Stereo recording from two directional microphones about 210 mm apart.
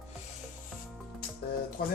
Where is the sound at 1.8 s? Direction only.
45° left (ahead or behind).